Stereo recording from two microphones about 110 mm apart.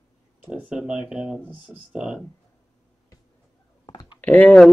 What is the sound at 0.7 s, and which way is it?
Speech, 5° right (ahead or behind).